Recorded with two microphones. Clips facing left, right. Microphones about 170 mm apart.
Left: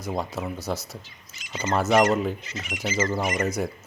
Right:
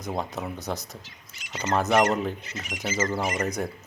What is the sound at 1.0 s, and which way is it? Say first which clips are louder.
Speech: even; 65° right (ahead or behind).